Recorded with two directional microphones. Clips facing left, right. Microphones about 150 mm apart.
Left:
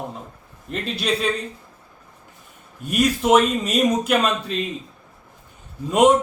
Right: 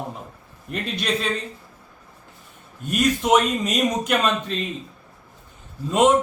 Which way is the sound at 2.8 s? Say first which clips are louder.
Left 2 dB; 10° left (ahead or behind).